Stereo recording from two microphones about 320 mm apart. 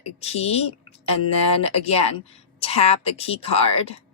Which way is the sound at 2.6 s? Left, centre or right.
Centre.